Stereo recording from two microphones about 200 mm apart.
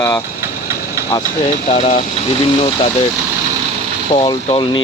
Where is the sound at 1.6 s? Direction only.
25° left (ahead or behind).